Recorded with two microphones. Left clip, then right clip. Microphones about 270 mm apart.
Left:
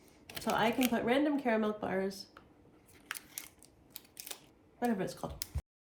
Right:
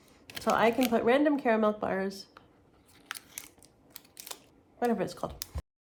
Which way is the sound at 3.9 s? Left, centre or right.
Centre.